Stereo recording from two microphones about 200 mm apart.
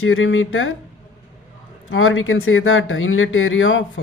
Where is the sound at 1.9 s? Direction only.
85° left.